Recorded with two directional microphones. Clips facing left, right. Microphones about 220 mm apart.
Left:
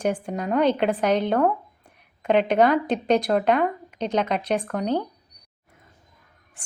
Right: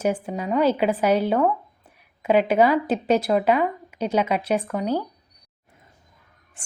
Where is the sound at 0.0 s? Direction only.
5° right (ahead or behind).